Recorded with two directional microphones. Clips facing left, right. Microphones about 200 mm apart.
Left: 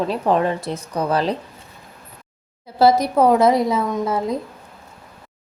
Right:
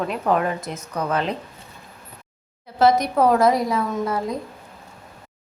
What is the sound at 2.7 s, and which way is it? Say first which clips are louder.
A woman's voice: left 2 dB; 30° left (ahead or behind).